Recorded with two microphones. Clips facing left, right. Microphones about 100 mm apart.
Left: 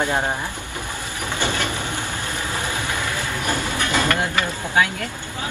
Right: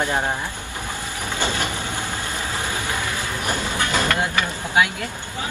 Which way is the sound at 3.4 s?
20° right (ahead or behind).